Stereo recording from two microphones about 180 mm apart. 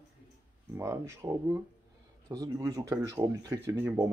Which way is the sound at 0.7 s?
15° right (ahead or behind).